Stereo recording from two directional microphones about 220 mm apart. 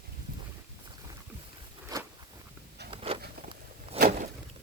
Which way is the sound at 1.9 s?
20° right (ahead or behind).